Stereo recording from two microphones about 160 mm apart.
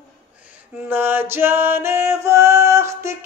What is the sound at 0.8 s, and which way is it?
Music, 10° right (ahead or behind).